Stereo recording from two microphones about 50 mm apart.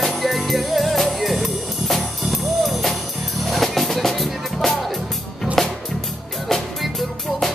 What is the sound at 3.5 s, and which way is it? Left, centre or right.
Music, centre.